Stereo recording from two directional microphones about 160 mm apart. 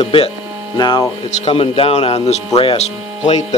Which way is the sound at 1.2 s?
40° left (ahead or behind).